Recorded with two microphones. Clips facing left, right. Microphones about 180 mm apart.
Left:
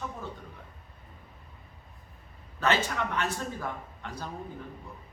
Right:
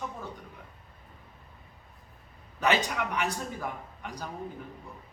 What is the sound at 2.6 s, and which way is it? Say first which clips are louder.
A man's voice: even; 15° right (ahead or behind).